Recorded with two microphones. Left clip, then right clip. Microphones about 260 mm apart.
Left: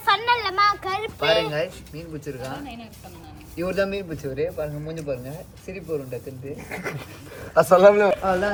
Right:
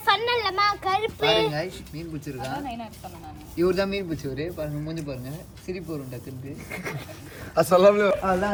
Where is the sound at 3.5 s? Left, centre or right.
Centre.